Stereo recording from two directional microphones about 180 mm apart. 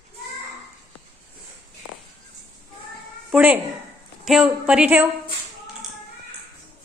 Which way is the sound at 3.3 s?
10° right (ahead or behind).